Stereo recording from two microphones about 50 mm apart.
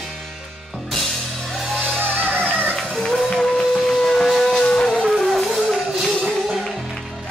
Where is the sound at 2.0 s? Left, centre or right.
Right.